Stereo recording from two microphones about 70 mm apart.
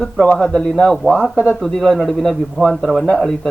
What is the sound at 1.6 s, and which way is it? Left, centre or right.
Speech, centre.